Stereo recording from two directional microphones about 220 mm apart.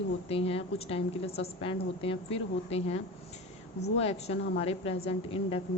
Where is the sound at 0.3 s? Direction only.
25° left (ahead or behind).